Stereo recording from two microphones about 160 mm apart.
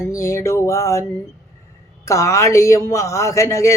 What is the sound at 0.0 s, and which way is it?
A man's voice, 20° left (ahead or behind).